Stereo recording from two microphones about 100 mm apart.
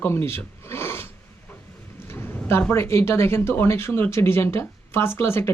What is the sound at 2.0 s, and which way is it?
Speech, 20° left (ahead or behind).